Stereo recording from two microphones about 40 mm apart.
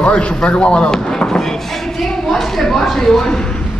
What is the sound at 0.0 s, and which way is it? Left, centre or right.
A woman's voice, left.